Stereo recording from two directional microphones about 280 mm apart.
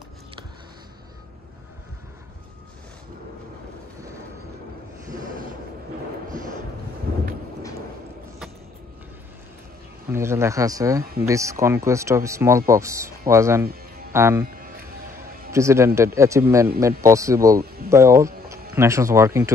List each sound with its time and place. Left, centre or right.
10.0 s speech: centre
13.7 s music: right
14.1 s speech: centre
14.4 s a sound: right
15.5 s speech: centre